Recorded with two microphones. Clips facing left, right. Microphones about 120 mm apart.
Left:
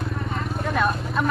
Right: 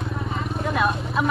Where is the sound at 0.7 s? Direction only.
Centre (ahead or behind).